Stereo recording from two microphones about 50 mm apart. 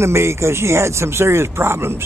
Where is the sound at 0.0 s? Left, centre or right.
Right.